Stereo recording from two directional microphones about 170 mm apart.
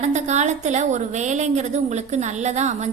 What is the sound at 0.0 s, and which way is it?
A woman's voice, 45° right (ahead or behind).